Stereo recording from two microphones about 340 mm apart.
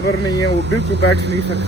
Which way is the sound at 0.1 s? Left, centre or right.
Left.